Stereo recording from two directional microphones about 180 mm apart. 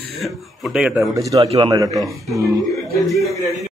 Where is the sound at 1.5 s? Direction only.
25° right (ahead or behind).